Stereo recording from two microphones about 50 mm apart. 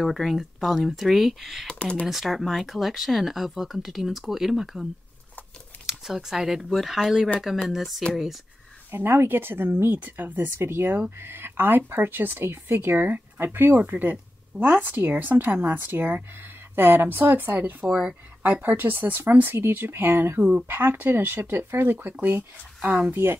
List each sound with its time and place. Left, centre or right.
0.0 s speech: centre
1.7 s speech: left
2.0 s speech: centre
5.9 s speech: centre
8.9 s speech: right
9.9 s speech: right